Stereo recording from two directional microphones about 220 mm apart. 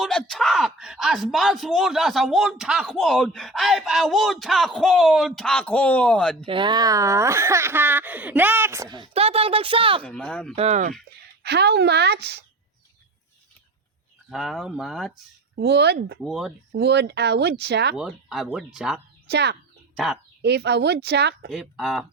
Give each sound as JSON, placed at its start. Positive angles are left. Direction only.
{"t": 0.0, "sound": "speech", "side_deg": 0}
{"t": 6.4, "sound": "speech", "side_deg": -20}
{"t": 10.0, "sound": "speech", "side_deg": 0}
{"t": 10.5, "sound": "speech", "side_deg": -30}
{"t": 11.4, "sound": "speech", "side_deg": -50}
{"t": 14.3, "sound": "speech", "side_deg": 0}
{"t": 15.5, "sound": "speech", "side_deg": -50}
{"t": 16.2, "sound": "speech", "side_deg": 0}
{"t": 16.7, "sound": "speech", "side_deg": -50}
{"t": 17.9, "sound": "speech", "side_deg": 0}
{"t": 19.3, "sound": "speech", "side_deg": -50}
{"t": 21.5, "sound": "speech", "side_deg": 0}